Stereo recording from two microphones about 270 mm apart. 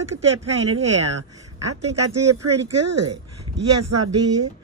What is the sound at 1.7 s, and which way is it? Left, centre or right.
Speech, right.